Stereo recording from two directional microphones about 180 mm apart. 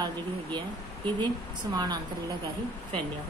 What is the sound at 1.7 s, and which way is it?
Speech, 25° right (ahead or behind).